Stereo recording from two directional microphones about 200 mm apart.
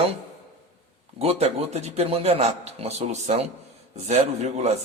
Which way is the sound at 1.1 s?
30° right (ahead or behind).